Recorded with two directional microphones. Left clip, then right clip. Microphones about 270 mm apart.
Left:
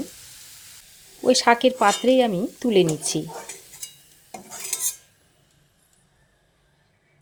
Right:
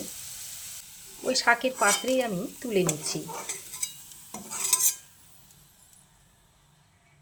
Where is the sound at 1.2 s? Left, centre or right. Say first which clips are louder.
Left 7 dB; left.